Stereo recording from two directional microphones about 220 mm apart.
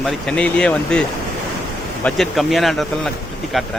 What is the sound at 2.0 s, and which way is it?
Speech, centre (ahead or behind).